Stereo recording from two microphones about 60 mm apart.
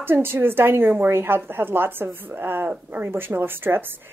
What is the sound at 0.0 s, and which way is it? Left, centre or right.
A woman's voice, right.